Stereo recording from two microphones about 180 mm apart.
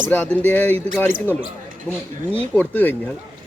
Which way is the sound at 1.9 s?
5° left (ahead or behind).